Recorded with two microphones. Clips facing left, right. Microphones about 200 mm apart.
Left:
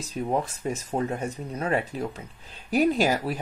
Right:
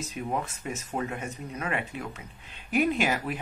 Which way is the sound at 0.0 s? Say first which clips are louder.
Left 5 dB; 35° left (ahead or behind).